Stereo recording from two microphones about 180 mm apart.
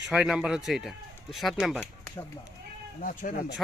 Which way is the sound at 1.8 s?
20° left (ahead or behind).